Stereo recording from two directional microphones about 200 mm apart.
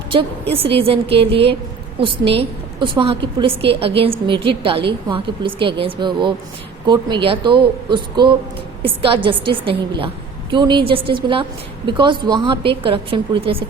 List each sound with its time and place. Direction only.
0.5 s a woman's voice: 30° right (ahead or behind)